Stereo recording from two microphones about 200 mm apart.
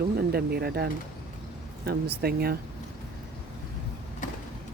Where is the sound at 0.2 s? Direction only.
50° right (ahead or behind).